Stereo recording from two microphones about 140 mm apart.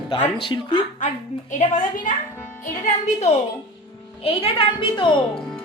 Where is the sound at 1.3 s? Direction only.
55° left (ahead or behind).